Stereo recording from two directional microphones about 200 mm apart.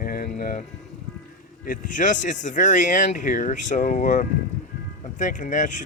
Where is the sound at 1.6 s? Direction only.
40° left (ahead or behind).